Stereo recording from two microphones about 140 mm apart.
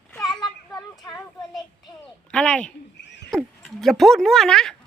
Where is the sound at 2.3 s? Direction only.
5° left (ahead or behind).